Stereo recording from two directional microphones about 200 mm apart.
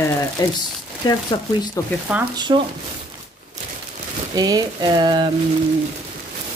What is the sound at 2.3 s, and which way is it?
Frying, 20° right (ahead or behind).